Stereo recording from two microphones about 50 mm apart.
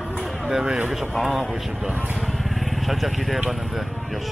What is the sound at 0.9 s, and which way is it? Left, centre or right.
Speech, centre.